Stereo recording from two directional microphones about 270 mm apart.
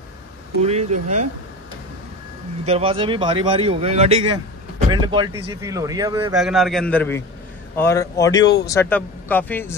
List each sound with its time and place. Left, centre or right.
0.6 s speech: right
2.6 s speech: right
6.3 s a man's voice: centre